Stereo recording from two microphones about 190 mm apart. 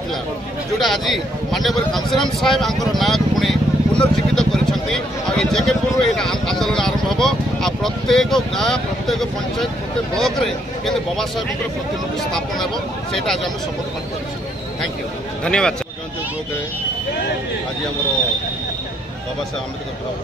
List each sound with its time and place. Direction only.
0.7 s speech: centre (ahead or behind)
15.4 s speech: 5° left (ahead or behind)